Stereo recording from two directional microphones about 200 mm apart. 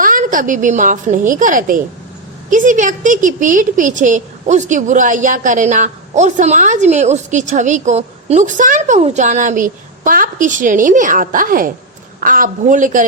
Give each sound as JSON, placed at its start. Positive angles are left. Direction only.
{"t": 0.0, "sound": "a woman's voice", "side_deg": -40}